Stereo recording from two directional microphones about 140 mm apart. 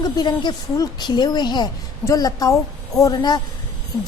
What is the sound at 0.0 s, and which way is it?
A woman's voice, 30° left (ahead or behind).